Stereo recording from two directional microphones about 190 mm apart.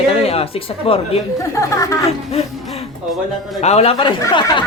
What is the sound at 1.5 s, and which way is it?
Speech, 15° left (ahead or behind).